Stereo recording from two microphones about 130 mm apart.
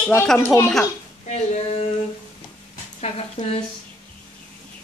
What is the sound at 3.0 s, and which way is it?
Speech, 55° left (ahead or behind).